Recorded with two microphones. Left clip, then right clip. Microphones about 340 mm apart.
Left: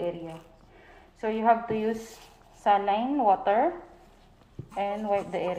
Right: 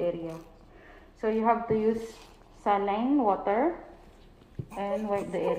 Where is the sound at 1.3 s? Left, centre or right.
Left.